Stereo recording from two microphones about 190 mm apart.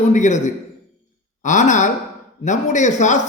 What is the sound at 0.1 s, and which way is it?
A man's voice, 40° left (ahead or behind).